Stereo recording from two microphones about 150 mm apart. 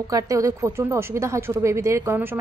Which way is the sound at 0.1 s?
20° right (ahead or behind).